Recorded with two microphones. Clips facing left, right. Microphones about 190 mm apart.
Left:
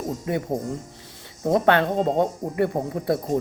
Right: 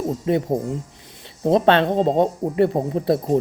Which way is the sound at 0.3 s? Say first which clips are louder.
Right 5 dB; 25° right (ahead or behind).